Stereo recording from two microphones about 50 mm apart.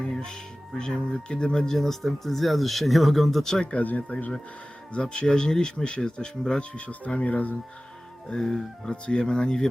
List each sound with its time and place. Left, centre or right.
0.2 s speech: centre
3.7 s speech: left
4.9 s speech: left
8.3 s speech: centre